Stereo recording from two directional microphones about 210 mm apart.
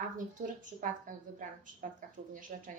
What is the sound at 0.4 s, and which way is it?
A woman's voice, 40° right (ahead or behind).